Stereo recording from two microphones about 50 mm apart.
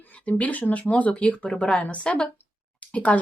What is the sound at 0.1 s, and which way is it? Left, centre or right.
A woman's voice, left.